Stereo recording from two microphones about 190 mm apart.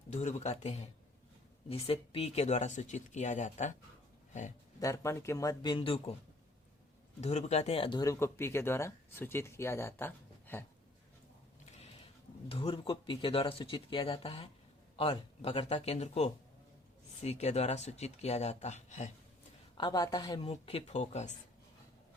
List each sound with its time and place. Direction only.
0.1 s speech: 40° left (ahead or behind)
4.8 s speech: 15° left (ahead or behind)
7.2 s speech: 35° left (ahead or behind); by 10.7 s 10° left (ahead or behind)
11.7 s a sound: 35° left (ahead or behind)
12.5 s speech: 30° left (ahead or behind)
19.7 s speech: 25° left (ahead or behind)
20.5 s speech: 35° left (ahead or behind)